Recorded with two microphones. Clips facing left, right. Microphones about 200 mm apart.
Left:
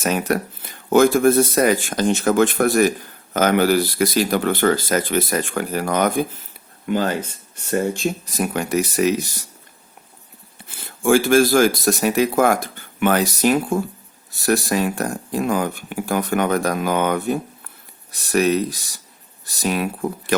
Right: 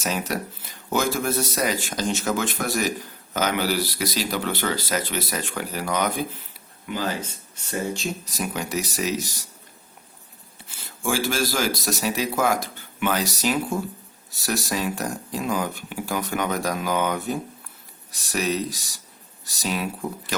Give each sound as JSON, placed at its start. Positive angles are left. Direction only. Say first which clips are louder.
{"t": 0.0, "sound": "speech", "louder": "left 6 dB", "side_deg": 55}
{"t": 10.7, "sound": "speech", "louder": "left 10 dB", "side_deg": 55}